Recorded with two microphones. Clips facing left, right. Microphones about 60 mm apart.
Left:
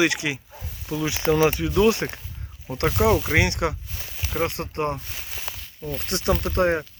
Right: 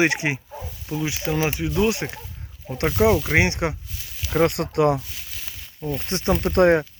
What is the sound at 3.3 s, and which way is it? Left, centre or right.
Speech, right.